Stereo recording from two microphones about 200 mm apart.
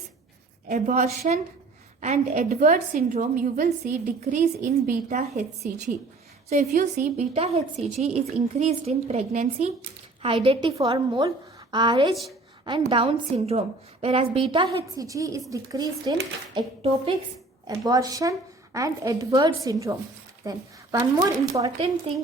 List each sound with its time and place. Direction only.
0.7 s a woman's voice: 35° right (ahead or behind)
6.5 s a woman's voice: 35° right (ahead or behind); by 16.1 s 20° right (ahead or behind)
16.6 s a woman's voice: 30° right (ahead or behind)
17.7 s a woman's voice: 20° right (ahead or behind)
22.1 s a woman's voice: 30° right (ahead or behind)